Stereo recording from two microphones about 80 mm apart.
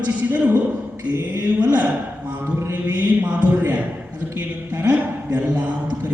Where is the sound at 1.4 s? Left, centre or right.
Centre.